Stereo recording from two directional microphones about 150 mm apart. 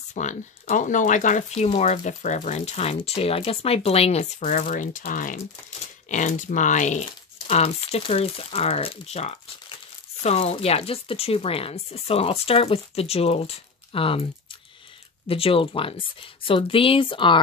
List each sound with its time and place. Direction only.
0.1 s speech: 55° left (ahead or behind); by 14.2 s 40° left (ahead or behind)
15.2 s speech: 40° left (ahead or behind)